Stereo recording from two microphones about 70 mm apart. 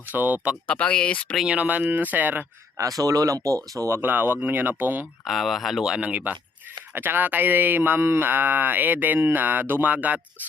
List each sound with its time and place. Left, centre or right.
0.1 s speech: right
0.7 s speech: centre
1.5 s speech: right
2.7 s speech: right
3.9 s speech: right
5.2 s speech: centre
6.0 s speech: right